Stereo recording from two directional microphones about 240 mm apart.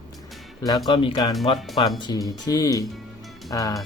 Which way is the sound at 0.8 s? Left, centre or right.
Left.